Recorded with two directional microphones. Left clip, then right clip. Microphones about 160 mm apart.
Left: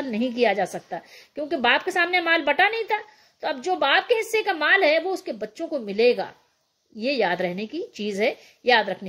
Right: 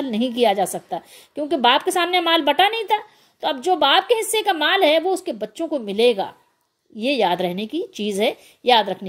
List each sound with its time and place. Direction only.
0.1 s a woman's voice: 25° right (ahead or behind)